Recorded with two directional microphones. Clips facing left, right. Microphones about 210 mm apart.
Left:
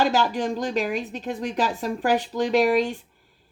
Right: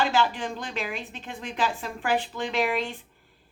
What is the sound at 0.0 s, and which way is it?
A woman's voice, 40° left (ahead or behind).